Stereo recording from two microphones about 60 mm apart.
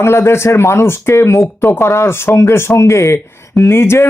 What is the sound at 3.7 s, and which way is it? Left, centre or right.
Speech, left.